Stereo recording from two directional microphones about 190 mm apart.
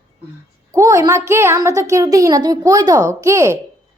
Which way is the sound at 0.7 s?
15° right (ahead or behind).